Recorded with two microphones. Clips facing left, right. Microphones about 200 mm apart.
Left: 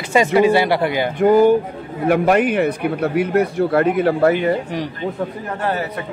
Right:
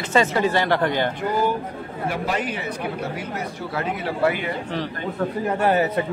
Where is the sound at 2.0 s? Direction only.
60° left (ahead or behind); by 4.5 s 45° left (ahead or behind).